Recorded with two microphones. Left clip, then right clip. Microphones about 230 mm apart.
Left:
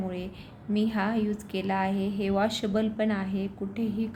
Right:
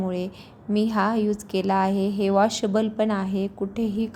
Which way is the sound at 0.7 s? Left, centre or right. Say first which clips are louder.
Right 6 dB; right.